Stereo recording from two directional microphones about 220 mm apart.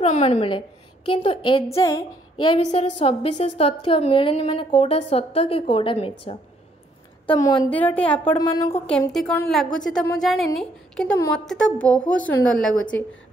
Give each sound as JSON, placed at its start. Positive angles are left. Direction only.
{"t": 0.0, "sound": "a woman's voice", "side_deg": 30}
{"t": 8.3, "sound": "a woman's voice", "side_deg": 15}